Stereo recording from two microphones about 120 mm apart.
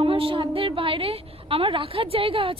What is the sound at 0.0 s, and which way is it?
A woman's voice, 50° right (ahead or behind).